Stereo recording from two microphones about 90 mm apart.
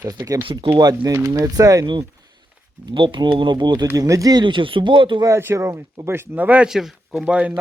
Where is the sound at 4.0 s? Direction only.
40° right (ahead or behind).